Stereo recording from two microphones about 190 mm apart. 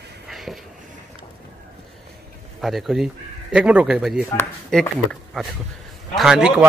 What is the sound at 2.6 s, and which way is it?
A man's voice, centre (ahead or behind).